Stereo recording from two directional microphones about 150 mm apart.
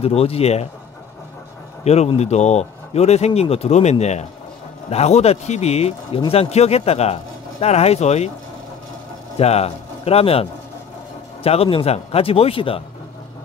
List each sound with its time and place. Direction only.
0.0 s speech: 40° left (ahead or behind)
1.9 s speech: 45° left (ahead or behind)
9.4 s speech: 45° left (ahead or behind)